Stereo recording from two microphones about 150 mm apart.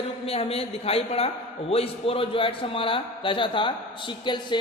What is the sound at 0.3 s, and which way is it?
Speech, 40° left (ahead or behind).